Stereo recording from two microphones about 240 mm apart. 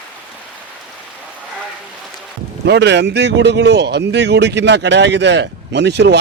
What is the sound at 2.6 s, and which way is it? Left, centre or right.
Speech, right.